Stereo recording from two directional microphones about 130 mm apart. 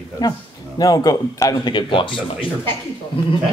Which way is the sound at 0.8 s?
30° left (ahead or behind).